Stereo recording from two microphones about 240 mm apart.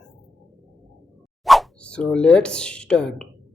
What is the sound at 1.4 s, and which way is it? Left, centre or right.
Speech, centre.